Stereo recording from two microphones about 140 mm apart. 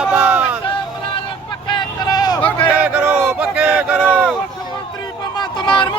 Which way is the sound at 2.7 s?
10° right (ahead or behind).